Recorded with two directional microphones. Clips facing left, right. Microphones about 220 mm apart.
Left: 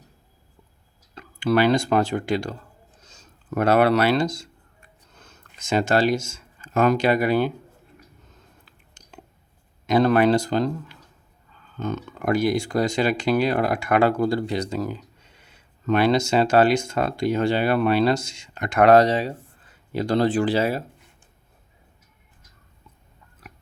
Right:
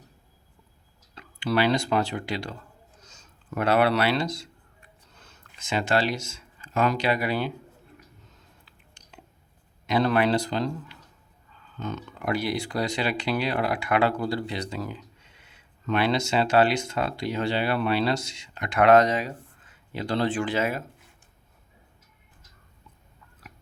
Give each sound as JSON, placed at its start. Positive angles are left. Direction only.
{"t": 1.1, "sound": "speech", "side_deg": 50}
{"t": 8.6, "sound": "a sound", "side_deg": 45}
{"t": 9.8, "sound": "speech", "side_deg": 45}